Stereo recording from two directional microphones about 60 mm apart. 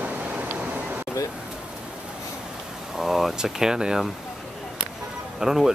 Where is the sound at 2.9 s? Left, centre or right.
Centre.